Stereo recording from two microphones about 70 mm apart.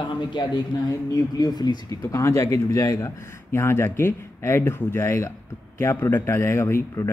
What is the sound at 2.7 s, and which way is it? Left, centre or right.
Speech, left.